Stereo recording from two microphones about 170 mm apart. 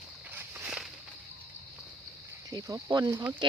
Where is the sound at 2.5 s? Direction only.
20° right (ahead or behind).